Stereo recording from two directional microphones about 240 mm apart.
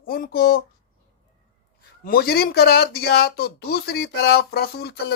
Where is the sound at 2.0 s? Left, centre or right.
Left.